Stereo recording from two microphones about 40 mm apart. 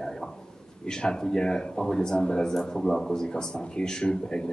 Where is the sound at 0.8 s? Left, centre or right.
Centre.